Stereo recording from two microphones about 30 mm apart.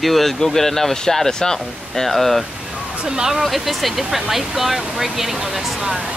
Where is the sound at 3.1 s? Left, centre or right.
Right.